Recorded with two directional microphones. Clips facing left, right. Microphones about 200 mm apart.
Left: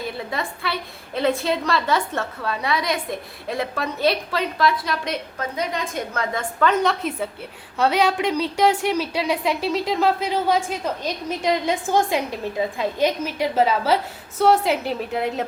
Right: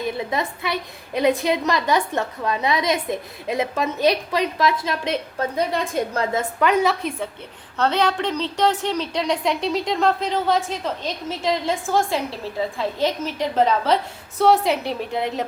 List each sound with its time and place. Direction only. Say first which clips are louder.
0.2 s a woman's voice: right 3 dB; 20° right (ahead or behind)
6.8 s a woman's voice: even; centre (ahead or behind)